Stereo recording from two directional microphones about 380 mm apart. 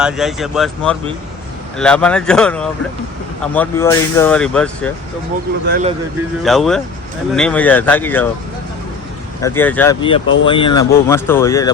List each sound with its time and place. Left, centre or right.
0.0 s speech: centre
5.6 s speech: right
6.4 s speech: centre
9.4 s speech: centre